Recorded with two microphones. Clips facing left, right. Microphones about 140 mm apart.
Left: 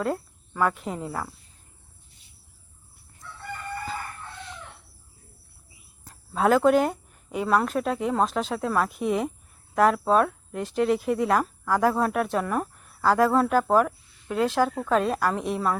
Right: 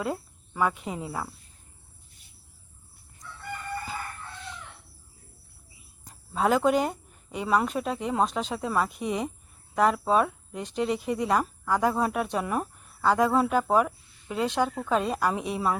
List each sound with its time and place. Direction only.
0.0 s speech: 5° right (ahead or behind)
6.1 s speech: centre (ahead or behind)